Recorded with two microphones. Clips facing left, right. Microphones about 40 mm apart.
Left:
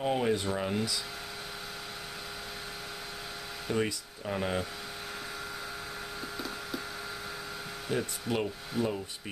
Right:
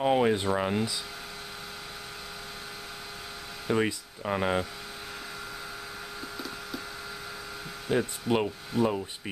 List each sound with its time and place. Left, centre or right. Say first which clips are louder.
0.0 s speech: right 5 dB; right
3.6 s speech: right 4 dB; centre
6.3 s wood: even; centre
7.9 s speech: right 5 dB; centre
8.8 s speech: right 5 dB; centre